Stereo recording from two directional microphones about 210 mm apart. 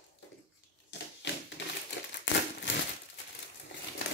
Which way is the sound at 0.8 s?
55° left (ahead or behind).